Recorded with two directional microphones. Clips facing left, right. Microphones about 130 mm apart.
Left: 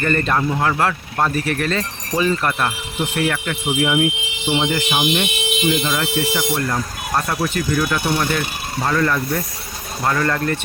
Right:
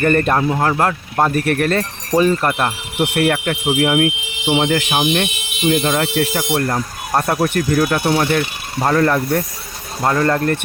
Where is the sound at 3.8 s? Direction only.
60° right (ahead or behind).